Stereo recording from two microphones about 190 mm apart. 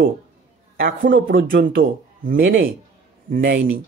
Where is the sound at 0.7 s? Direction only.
50° right (ahead or behind).